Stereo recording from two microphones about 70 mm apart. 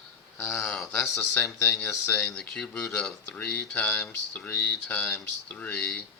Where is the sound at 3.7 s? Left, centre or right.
Left.